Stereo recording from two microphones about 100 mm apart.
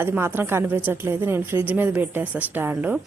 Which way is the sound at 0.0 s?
20° right (ahead or behind).